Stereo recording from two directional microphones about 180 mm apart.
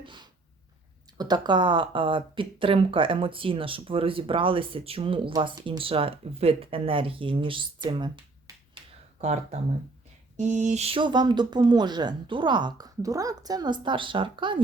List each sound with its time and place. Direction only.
0.0 s a sound: 25° right (ahead or behind)
1.2 s speech: 25° right (ahead or behind)
10.3 s speech: 40° right (ahead or behind)